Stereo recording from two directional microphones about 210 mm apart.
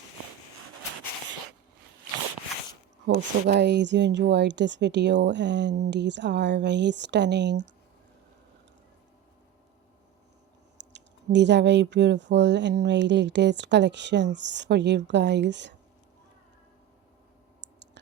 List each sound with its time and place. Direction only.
3.4 s speech: 50° right (ahead or behind)
10.8 s speech: 55° right (ahead or behind)
17.6 s clicking: 55° right (ahead or behind)